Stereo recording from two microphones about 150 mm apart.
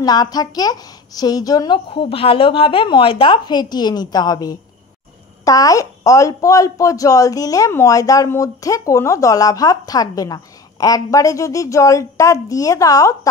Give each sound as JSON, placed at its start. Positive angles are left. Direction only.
{"t": 0.0, "sound": "a woman's voice", "side_deg": 25}